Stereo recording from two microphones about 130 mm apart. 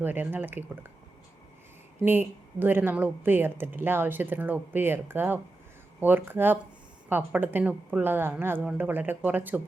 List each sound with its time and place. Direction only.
0.0 s speech: 15° right (ahead or behind)
2.0 s speech: 15° right (ahead or behind)